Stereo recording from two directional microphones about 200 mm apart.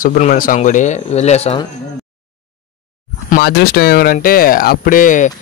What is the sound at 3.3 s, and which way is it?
Speech, 50° left (ahead or behind).